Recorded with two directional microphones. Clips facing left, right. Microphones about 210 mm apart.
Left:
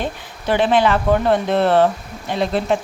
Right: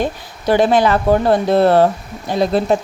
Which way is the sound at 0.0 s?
40° right (ahead or behind).